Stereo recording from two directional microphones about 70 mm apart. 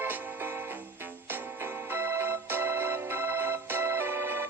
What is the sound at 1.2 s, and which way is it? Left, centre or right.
Organ, right.